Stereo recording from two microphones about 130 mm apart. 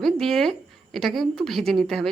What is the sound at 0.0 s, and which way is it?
A woman's voice, centre (ahead or behind).